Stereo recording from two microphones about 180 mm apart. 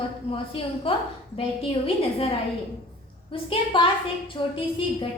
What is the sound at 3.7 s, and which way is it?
Speech, 30° left (ahead or behind).